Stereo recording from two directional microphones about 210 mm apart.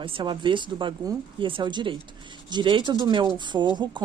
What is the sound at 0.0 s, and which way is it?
Speech, 25° right (ahead or behind).